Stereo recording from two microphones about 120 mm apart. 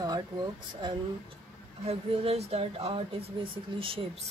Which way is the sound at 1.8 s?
60° right (ahead or behind).